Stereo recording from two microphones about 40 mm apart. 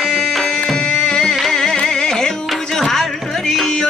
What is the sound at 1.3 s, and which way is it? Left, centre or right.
Carnatic music, centre.